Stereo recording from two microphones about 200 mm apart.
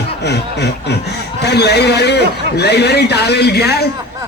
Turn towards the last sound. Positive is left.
turn(degrees=55)  # may be behind; listen again after turning